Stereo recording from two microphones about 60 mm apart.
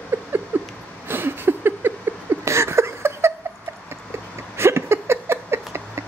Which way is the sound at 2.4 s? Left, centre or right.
Right.